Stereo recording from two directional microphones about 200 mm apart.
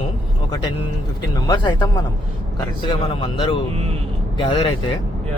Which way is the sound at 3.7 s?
30° right (ahead or behind).